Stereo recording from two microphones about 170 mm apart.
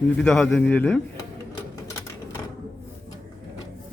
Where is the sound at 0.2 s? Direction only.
5° left (ahead or behind).